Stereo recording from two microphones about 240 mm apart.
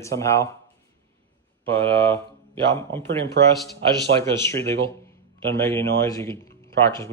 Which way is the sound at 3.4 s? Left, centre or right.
Right.